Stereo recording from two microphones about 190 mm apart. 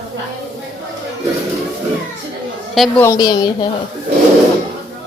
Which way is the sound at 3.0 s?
20° left (ahead or behind).